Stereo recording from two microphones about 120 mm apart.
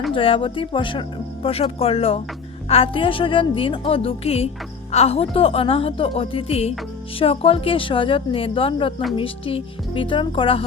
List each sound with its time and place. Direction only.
0.1 s speech: 50° left (ahead or behind)